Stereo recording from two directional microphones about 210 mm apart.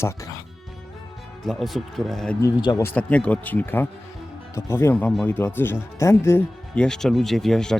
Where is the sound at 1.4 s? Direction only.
Centre (ahead or behind).